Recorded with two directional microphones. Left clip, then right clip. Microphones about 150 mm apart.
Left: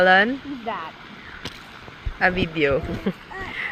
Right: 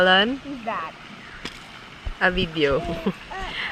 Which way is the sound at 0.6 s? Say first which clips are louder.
Right 2 dB; 10° right (ahead or behind).